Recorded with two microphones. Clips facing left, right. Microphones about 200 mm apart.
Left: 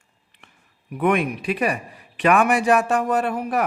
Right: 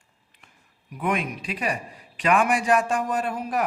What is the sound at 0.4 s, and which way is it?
A man's voice, 65° left (ahead or behind).